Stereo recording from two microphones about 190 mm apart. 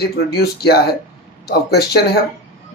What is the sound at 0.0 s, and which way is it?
Speech, 60° left (ahead or behind).